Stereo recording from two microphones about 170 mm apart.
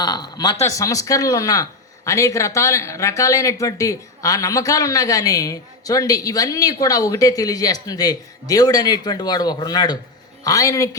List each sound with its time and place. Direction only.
0.0 s speech: 25° left (ahead or behind)